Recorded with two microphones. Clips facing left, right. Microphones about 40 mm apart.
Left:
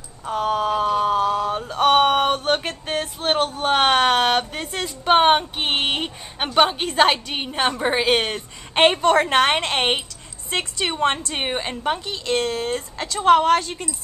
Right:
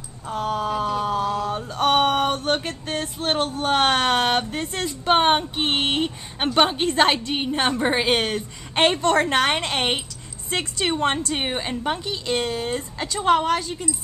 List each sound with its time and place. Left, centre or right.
0.2 s a sound: centre
2.9 s a woman's voice: centre
8.7 s a woman's voice: centre